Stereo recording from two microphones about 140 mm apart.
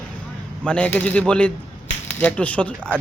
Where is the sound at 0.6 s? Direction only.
10° left (ahead or behind).